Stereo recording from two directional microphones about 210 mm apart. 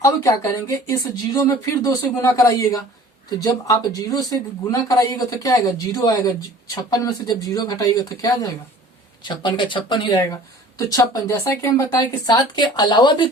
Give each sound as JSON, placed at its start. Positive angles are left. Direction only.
{"t": 0.0, "sound": "speech", "side_deg": 15}